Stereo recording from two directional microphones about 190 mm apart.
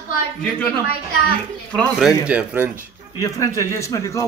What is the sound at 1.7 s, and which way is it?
A man's voice, centre (ahead or behind).